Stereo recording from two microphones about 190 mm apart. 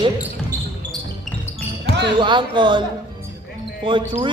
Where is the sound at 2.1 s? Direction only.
25° right (ahead or behind).